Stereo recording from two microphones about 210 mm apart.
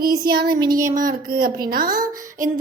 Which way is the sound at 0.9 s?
40° right (ahead or behind).